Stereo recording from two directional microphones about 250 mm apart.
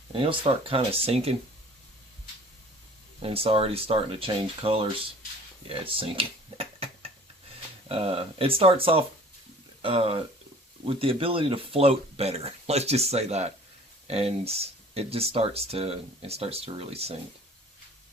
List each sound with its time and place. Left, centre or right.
0.1 s speech: right
3.2 s speech: right